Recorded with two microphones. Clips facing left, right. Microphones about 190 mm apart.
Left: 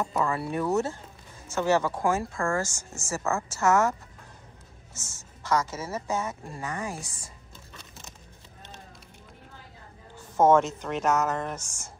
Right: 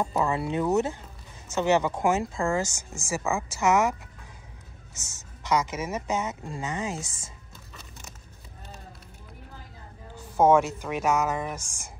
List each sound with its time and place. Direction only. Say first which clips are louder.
0.0 s speech: right 2 dB; 25° right (ahead or behind)
4.9 s speech: left 2 dB; 20° right (ahead or behind)
10.1 s speech: even; 10° right (ahead or behind)